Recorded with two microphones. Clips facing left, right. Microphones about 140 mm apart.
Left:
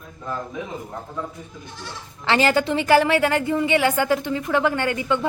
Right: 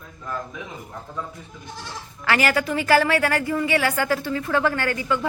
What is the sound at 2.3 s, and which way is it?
A woman's voice, 25° left (ahead or behind).